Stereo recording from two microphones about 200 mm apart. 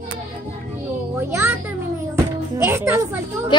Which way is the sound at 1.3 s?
10° right (ahead or behind).